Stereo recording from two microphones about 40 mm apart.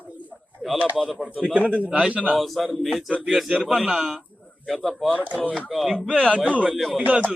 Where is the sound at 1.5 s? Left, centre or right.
Right.